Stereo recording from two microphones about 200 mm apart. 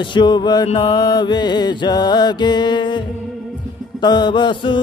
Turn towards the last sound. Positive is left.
turn(degrees=20)  # may be behind; listen again after turning